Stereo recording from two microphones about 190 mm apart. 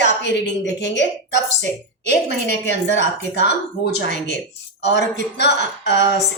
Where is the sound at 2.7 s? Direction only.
70° left (ahead or behind).